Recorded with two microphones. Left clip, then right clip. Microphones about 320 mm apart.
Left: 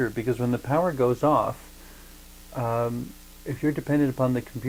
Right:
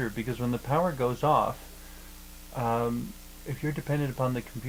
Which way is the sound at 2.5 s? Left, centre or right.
Left.